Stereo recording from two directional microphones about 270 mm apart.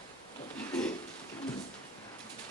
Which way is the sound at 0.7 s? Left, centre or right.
Centre.